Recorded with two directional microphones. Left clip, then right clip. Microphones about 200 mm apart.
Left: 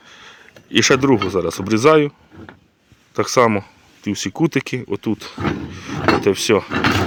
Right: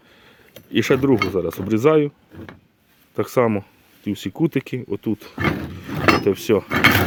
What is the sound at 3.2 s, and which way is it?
Speech, 10° right (ahead or behind).